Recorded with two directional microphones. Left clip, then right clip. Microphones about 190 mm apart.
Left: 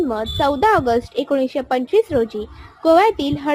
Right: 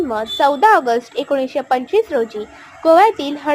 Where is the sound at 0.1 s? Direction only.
20° left (ahead or behind).